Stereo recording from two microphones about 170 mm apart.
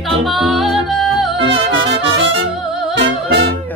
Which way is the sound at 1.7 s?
90° right.